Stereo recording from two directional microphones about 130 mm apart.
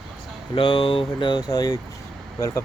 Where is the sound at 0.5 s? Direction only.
40° left (ahead or behind).